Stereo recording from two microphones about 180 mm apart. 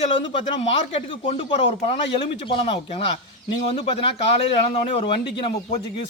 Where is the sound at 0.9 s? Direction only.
30° left (ahead or behind).